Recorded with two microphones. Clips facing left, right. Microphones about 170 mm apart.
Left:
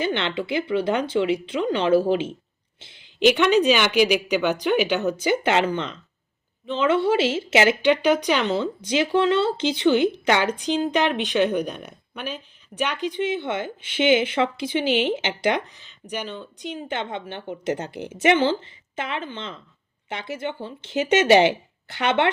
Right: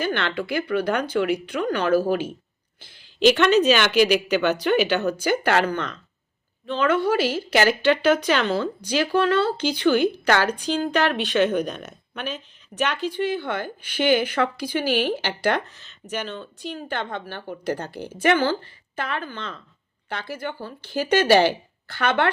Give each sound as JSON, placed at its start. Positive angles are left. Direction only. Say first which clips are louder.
{"t": 0.0, "sound": "a woman's voice", "louder": "even", "side_deg": 20}
{"t": 3.3, "sound": "a woman's voice", "louder": "right 1 dB", "side_deg": 15}